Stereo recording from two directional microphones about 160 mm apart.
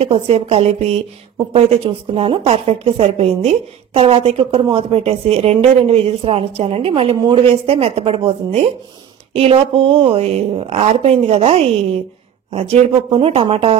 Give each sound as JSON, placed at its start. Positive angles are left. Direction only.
{"t": 0.0, "sound": "a woman's voice", "side_deg": -40}